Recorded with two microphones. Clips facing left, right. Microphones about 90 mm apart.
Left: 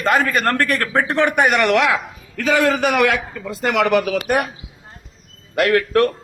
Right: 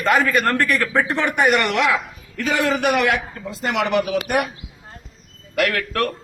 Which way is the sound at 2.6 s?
90° left.